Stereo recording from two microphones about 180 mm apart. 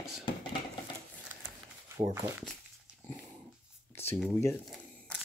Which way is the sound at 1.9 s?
20° right (ahead or behind).